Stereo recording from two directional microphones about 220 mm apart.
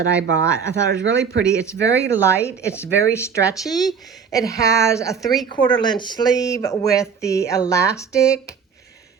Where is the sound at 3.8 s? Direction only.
15° left (ahead or behind).